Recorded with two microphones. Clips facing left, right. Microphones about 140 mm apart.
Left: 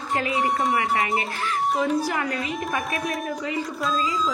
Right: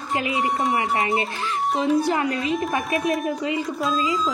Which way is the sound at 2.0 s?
25° right (ahead or behind).